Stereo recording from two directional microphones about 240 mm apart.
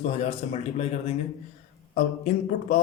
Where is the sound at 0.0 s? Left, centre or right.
Left.